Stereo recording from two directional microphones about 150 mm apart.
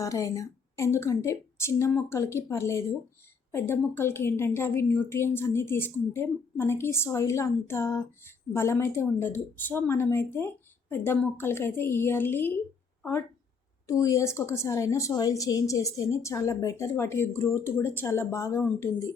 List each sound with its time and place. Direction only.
0.0 s a woman's voice: 20° left (ahead or behind)
13.8 s a woman's voice: 20° left (ahead or behind)